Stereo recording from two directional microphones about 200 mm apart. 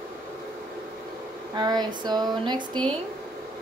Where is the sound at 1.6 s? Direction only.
20° right (ahead or behind).